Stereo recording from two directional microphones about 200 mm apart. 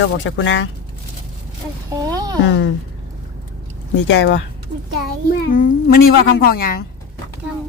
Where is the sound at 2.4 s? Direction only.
60° left (ahead or behind).